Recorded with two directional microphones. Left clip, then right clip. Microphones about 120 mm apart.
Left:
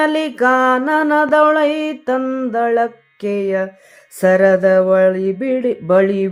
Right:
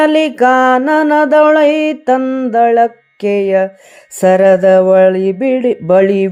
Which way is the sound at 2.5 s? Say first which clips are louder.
Right 7 dB; 40° right (ahead or behind).